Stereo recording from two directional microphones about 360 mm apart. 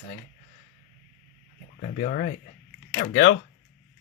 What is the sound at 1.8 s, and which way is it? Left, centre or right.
Speech, left.